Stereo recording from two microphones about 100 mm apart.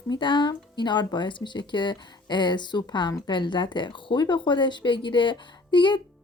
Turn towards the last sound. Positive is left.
turn(degrees=50)  # may be behind; listen again after turning